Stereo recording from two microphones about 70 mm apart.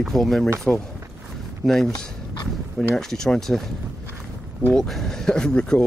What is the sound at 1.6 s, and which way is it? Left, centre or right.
Speech, centre.